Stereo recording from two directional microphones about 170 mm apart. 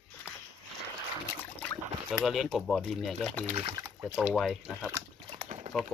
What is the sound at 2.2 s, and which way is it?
Speech, centre (ahead or behind).